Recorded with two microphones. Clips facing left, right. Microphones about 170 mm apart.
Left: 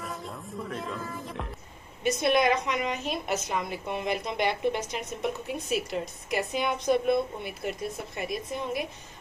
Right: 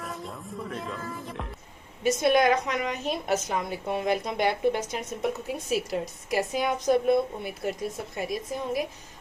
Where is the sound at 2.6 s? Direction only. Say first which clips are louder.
Right 1 dB; 45° right (ahead or behind).